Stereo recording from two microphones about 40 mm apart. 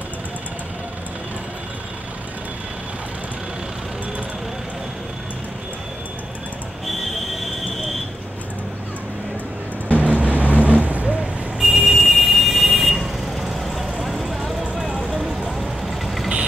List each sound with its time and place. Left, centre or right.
9.8 s vehicle: right
11.6 s vehicle: centre
15.1 s vehicle: centre
15.6 s vehicle: centre